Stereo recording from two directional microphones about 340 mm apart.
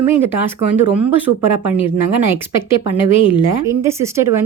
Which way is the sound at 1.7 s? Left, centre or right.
Centre.